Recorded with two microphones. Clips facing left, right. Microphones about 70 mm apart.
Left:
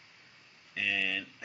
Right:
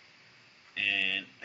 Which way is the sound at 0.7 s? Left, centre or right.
Centre.